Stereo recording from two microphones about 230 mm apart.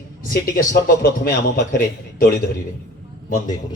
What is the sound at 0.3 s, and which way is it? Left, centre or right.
Speech, left.